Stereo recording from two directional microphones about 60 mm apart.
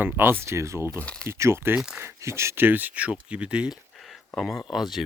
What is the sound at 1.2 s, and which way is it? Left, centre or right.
Speech, right.